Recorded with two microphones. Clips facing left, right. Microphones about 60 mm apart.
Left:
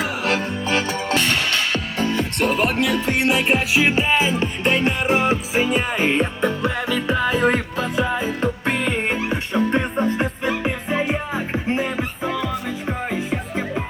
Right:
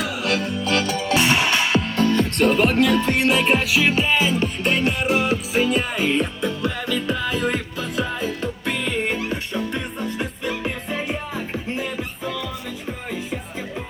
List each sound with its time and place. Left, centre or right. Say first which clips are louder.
0.0 s music: left 1 dB; left
0.7 s music: even; left
1.1 s music: right 2 dB; centre
2.0 s music: right 2 dB; centre
3.7 s music: left 1 dB; left
6.0 s music: left 2 dB; left